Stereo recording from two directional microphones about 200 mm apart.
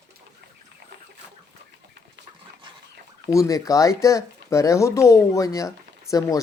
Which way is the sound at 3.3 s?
15° left (ahead or behind).